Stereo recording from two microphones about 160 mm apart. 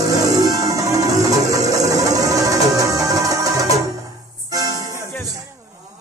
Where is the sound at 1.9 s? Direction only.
20° right (ahead or behind).